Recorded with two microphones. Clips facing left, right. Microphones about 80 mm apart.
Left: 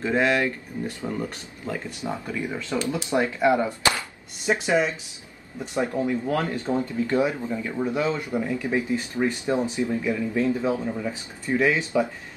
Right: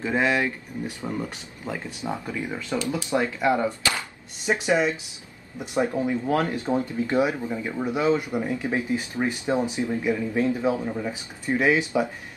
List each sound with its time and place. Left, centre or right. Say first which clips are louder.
0.0 s speech: left 1 dB; centre
2.8 s speech: left 1 dB; left
4.5 s speech: left 1 dB; centre
5.6 s speech: right 1 dB; centre